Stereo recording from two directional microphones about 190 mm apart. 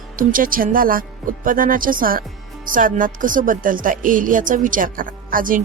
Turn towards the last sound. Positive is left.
turn(degrees=-45)  # may be behind; listen again after turning